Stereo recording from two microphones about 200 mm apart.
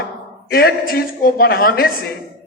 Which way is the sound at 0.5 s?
50° left (ahead or behind).